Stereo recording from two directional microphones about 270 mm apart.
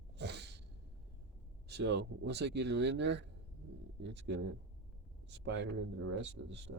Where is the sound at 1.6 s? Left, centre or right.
Right.